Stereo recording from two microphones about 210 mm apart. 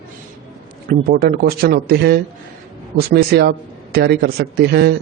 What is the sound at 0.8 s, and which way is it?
Speech, 45° right (ahead or behind).